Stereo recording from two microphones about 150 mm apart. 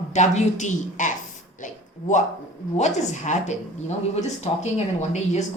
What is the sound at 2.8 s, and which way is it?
Speech, 50° left (ahead or behind).